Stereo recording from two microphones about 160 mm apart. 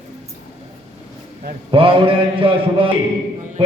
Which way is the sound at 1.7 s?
35° right (ahead or behind).